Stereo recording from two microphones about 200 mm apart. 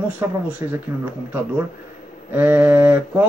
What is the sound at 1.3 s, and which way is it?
Speech, 10° right (ahead or behind).